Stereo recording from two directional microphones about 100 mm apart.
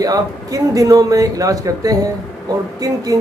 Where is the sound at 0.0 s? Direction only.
35° right (ahead or behind).